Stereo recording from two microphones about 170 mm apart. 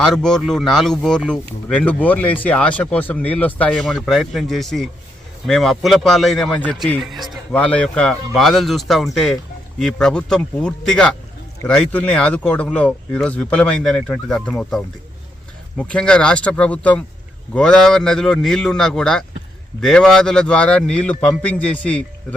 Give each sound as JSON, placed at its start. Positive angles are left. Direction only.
{"t": 0.0, "sound": "speech", "side_deg": 5}